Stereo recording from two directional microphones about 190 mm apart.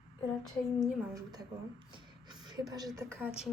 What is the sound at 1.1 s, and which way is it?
A woman's voice, 20° right (ahead or behind).